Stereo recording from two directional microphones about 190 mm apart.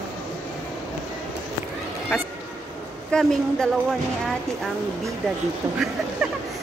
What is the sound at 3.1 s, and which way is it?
Speech, 5° left (ahead or behind).